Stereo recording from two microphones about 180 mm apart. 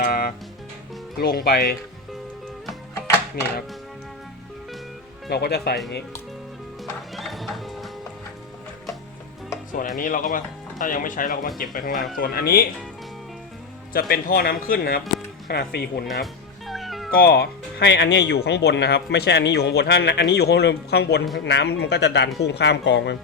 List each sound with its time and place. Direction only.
0.0 s music: 55° left (ahead or behind)
1.2 s speech: 60° left (ahead or behind)
5.3 s speech: 65° left (ahead or behind)
7.2 s music: centre (ahead or behind)
10.0 s speech: 50° left (ahead or behind)
13.9 s speech: 55° left (ahead or behind)
16.2 s music: centre (ahead or behind)
17.2 s speech: 60° left (ahead or behind); by 23.1 s 75° left (ahead or behind)